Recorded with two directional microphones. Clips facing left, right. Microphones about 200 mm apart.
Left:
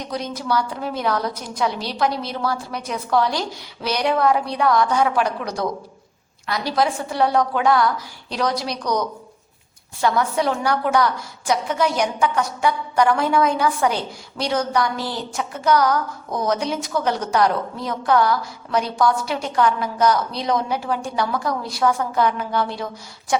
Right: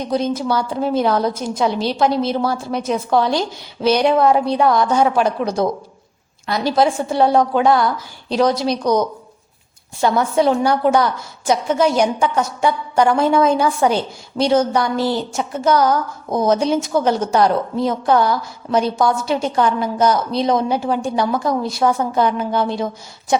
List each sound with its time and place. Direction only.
0.1 s a woman's voice: 25° right (ahead or behind)